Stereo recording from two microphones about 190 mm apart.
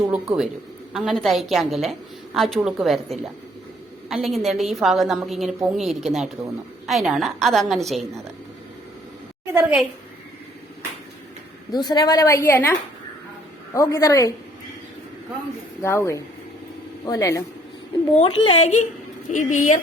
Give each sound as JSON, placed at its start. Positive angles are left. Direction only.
{"t": 0.1, "sound": "a woman's voice", "side_deg": 0}
{"t": 9.5, "sound": "a woman's voice", "side_deg": -10}
{"t": 11.7, "sound": "speech", "side_deg": 20}
{"t": 13.7, "sound": "speech", "side_deg": 15}
{"t": 15.8, "sound": "speech", "side_deg": 15}
{"t": 18.2, "sound": "a woman's voice", "side_deg": 30}